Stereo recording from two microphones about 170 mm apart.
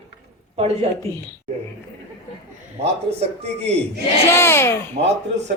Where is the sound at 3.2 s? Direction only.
40° right (ahead or behind).